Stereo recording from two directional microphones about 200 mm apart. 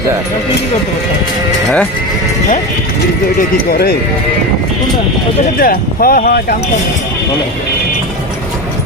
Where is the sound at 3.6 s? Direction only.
50° left (ahead or behind).